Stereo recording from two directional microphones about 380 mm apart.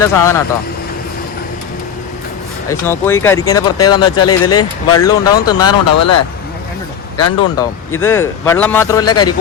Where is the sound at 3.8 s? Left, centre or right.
Left.